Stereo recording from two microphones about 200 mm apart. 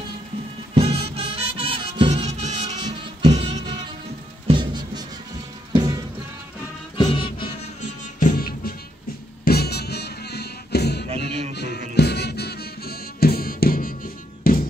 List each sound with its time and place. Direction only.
0.7 s music: 30° right (ahead or behind)
7.0 s music: 25° left (ahead or behind)
8.2 s music: 45° left (ahead or behind)
11.2 s music: 30° right (ahead or behind)
11.5 s music: 55° left (ahead or behind)